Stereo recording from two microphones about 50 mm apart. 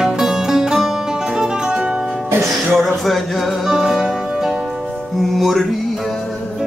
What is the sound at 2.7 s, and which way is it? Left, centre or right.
Music, centre.